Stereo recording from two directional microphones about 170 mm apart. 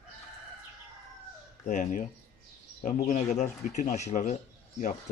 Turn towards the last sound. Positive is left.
turn(degrees=45)  # may be behind; listen again after turning